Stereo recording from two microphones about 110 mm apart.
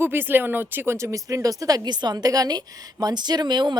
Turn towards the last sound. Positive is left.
turn(degrees=-40)  # may be behind; listen again after turning